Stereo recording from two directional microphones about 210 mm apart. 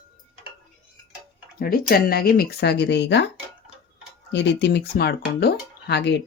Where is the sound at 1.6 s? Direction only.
45° left (ahead or behind).